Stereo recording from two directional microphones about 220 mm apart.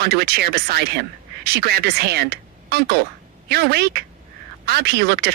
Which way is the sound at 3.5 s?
45° right (ahead or behind).